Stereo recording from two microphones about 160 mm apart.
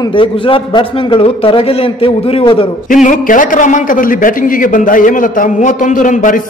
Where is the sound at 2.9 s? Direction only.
55° left (ahead or behind).